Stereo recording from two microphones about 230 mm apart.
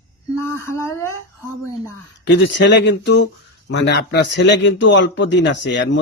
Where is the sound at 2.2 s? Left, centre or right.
Left.